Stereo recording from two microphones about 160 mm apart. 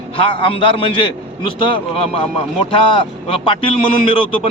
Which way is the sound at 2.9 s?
30° left (ahead or behind).